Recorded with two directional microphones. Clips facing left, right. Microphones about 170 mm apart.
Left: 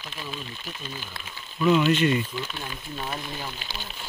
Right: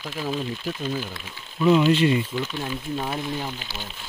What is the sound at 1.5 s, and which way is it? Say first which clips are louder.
Speech: right 3 dB; 20° right (ahead or behind).